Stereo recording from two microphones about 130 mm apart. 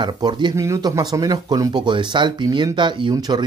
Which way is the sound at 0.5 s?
25° right (ahead or behind).